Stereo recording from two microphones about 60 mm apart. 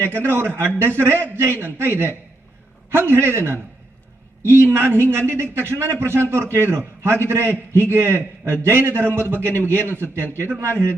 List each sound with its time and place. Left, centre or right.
0.0 s a man's voice: right